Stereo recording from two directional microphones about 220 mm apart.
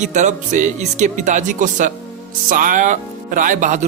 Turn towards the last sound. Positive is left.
turn(degrees=-35)  # may be behind; listen again after turning